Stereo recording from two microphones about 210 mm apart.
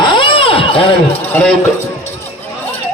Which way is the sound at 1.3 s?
5° left (ahead or behind).